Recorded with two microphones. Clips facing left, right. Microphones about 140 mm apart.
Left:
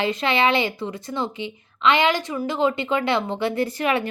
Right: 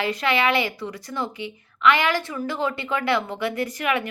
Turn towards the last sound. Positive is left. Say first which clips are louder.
# left 3 dB
turn(degrees=30)  # may be behind; listen again after turning